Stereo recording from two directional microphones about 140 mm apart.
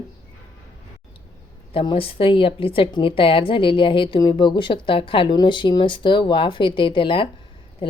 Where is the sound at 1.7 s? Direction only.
40° left (ahead or behind).